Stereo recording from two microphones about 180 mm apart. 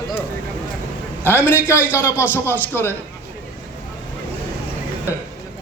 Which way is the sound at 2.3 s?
10° left (ahead or behind).